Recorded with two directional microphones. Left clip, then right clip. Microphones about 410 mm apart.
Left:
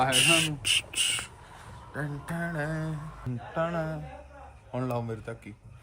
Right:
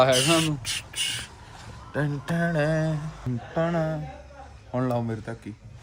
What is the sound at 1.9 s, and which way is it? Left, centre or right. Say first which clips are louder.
Mantra: right 7 dB; centre.